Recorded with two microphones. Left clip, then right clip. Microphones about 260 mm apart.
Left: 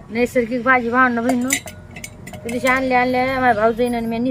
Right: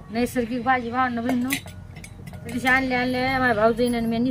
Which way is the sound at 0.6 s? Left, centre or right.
Centre.